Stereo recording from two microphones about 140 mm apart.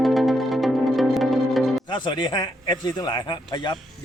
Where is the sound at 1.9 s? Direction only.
35° left (ahead or behind).